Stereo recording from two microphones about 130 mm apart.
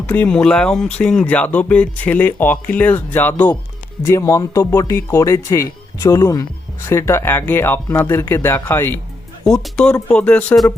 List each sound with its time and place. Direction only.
0.1 s speech: 10° left (ahead or behind)
9.4 s speech: 5° left (ahead or behind)